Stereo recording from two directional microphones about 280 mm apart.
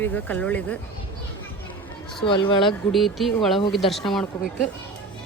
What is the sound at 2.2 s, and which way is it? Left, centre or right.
Speech, centre.